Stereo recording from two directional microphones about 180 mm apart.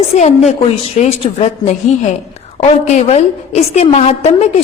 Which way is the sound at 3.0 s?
40° left (ahead or behind).